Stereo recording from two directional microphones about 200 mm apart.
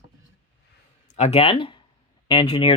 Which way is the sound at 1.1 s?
30° left (ahead or behind).